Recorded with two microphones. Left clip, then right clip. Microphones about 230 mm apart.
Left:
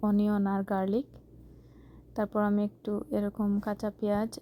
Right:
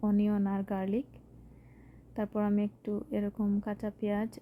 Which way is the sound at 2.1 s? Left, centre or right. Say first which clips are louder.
Left 4 dB; centre.